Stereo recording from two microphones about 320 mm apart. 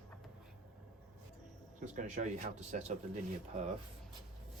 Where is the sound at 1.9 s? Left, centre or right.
Right.